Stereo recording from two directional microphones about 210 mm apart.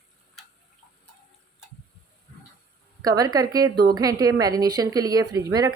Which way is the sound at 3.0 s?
15° right (ahead or behind).